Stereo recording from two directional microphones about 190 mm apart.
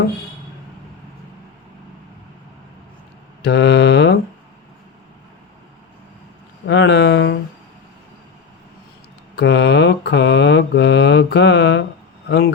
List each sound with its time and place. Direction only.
3.4 s mantra: 65° left (ahead or behind)
6.7 s a sound: 65° left (ahead or behind)
9.3 s mantra: 65° left (ahead or behind)